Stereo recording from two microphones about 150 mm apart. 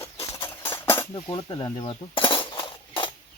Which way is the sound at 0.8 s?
15° left (ahead or behind).